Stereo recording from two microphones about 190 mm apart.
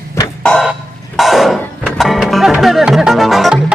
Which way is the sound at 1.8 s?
Centre (ahead or behind).